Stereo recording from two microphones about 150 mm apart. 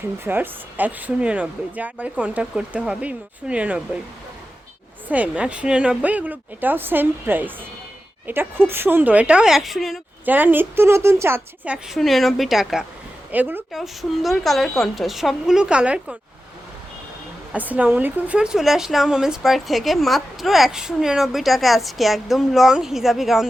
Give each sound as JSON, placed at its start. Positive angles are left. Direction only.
{"t": 0.3, "sound": "speech", "side_deg": -10}
{"t": 5.0, "sound": "speech", "side_deg": -10}
{"t": 10.2, "sound": "speech", "side_deg": -10}
{"t": 11.9, "sound": "a woman's voice", "side_deg": 0}
{"t": 13.3, "sound": "speech", "side_deg": -10}
{"t": 13.7, "sound": "a woman's voice", "side_deg": 0}
{"t": 17.5, "sound": "a woman's voice", "side_deg": -10}